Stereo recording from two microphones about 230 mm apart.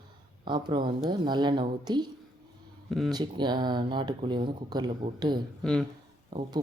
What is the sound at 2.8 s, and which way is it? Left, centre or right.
Speech, centre.